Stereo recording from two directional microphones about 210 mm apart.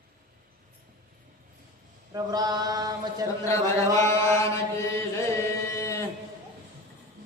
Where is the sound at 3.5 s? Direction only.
15° left (ahead or behind).